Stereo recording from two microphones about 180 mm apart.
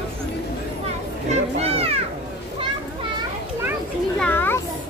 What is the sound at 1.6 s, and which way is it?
Children playing, 35° right (ahead or behind).